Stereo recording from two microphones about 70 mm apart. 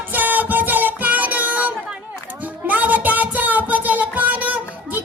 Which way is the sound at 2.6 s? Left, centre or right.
Right.